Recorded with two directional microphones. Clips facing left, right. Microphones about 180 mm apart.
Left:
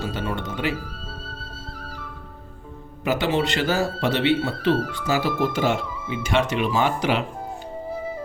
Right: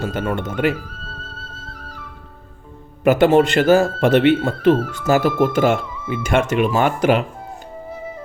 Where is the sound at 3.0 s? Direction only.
50° right (ahead or behind).